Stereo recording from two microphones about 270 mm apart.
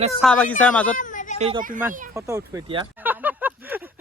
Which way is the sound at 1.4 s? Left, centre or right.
Right.